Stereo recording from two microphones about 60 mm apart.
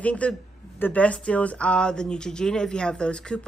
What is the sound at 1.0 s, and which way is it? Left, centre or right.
Speech, left.